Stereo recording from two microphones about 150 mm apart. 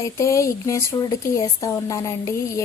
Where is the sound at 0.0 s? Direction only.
20° left (ahead or behind).